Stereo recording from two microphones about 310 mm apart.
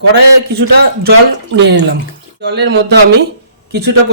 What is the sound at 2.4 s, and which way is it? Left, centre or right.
Speech, right.